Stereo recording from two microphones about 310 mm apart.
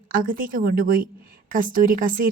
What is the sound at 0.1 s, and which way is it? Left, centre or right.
A woman's voice, right.